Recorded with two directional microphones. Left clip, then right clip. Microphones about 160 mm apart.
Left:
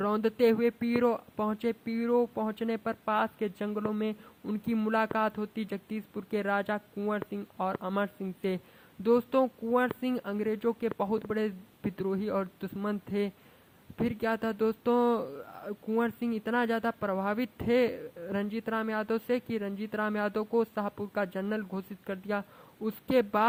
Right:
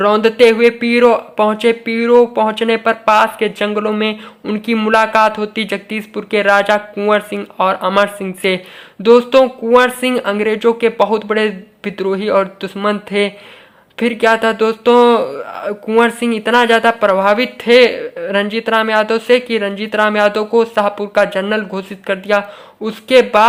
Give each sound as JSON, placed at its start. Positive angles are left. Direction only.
{"t": 0.0, "sound": "speech", "side_deg": 40}